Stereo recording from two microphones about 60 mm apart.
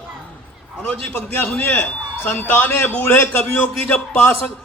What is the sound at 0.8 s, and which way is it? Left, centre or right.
Speech, left.